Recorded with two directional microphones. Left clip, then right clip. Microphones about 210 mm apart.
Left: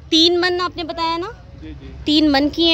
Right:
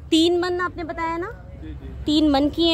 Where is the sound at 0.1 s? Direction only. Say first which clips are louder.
Left 4 dB; centre (ahead or behind).